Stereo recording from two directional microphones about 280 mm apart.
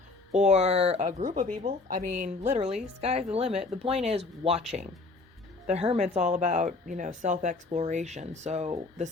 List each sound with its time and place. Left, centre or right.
0.3 s speech: right